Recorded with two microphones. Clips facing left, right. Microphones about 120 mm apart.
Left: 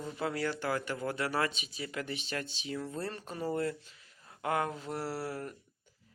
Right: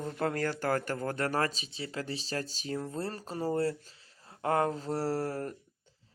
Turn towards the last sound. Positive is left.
turn(degrees=-40)  # may be behind; listen again after turning